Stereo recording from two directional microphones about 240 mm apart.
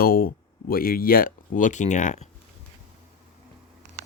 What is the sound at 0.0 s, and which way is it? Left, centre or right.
Speech, left.